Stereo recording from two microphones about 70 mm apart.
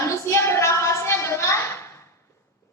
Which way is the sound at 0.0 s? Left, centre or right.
Left.